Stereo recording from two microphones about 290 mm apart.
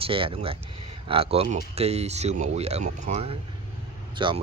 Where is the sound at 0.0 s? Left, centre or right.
Centre.